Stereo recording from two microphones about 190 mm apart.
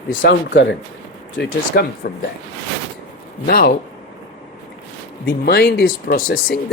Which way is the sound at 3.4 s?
50° left (ahead or behind).